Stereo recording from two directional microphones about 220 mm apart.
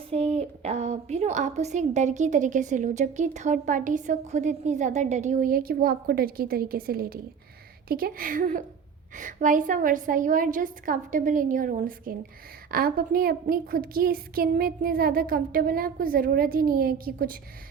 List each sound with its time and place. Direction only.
0.1 s a woman's voice: 30° right (ahead or behind)